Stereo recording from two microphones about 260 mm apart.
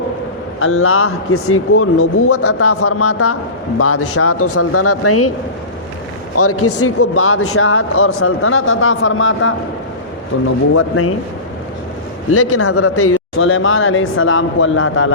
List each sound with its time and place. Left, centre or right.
0.6 s a man's voice: left
6.3 s a man's voice: left
12.3 s a man's voice: left